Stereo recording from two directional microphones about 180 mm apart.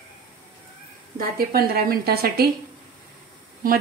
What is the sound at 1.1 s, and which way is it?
A woman's voice, 55° right (ahead or behind).